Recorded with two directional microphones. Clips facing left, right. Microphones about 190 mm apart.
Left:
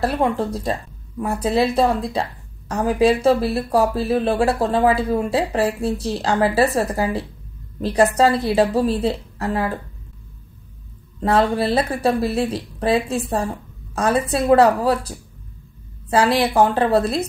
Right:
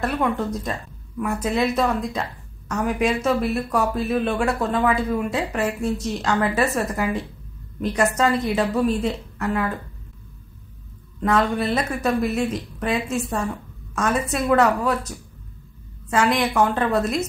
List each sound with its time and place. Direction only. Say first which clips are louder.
0.0 s speech: left 3 dB; 30° left (ahead or behind)
11.1 s speech: left 3 dB; 30° left (ahead or behind)